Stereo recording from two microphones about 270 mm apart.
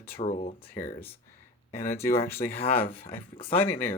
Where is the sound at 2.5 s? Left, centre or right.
Left.